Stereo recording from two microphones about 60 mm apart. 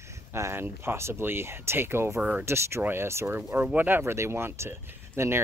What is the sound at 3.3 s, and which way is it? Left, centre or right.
Speech, right.